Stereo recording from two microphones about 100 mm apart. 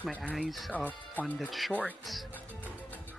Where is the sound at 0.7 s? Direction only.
15° left (ahead or behind).